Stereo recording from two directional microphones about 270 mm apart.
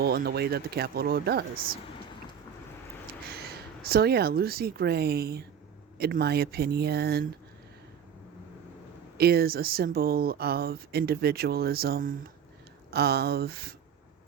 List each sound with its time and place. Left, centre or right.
0.0 s speech: right
3.8 s speech: right
9.1 s speech: right